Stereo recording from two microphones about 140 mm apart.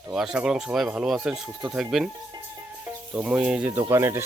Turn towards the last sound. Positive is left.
turn(degrees=-20)  # may be behind; listen again after turning